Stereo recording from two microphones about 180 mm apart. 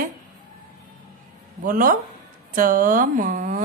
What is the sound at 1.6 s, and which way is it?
Speech, 50° right (ahead or behind).